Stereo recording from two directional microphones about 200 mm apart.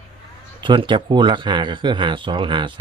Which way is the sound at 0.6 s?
25° right (ahead or behind).